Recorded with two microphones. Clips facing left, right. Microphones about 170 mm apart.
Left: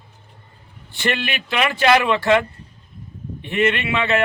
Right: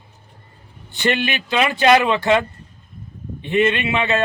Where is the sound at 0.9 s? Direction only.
20° right (ahead or behind).